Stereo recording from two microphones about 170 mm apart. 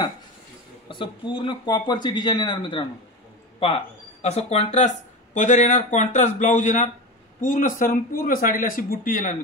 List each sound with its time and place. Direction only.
0.8 s speech: 30° left (ahead or behind); by 9.4 s 50° left (ahead or behind)